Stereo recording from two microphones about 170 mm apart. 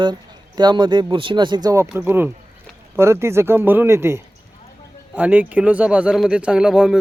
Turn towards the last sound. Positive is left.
turn(degrees=-5)  # may be behind; listen again after turning